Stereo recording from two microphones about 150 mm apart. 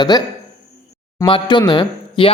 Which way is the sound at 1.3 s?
30° left (ahead or behind).